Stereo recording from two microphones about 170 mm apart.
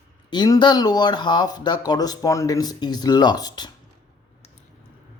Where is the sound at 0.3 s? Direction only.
25° left (ahead or behind).